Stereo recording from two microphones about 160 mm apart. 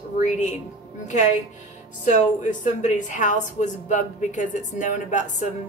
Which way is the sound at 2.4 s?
50° left (ahead or behind).